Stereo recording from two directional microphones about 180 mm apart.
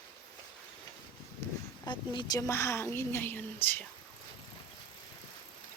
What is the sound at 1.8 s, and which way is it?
A woman's voice, 25° left (ahead or behind).